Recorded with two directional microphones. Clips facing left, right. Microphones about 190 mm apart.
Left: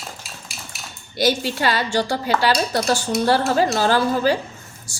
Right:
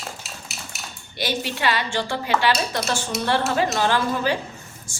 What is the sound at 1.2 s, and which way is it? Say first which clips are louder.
Speech: left 5 dB; 40° left (ahead or behind).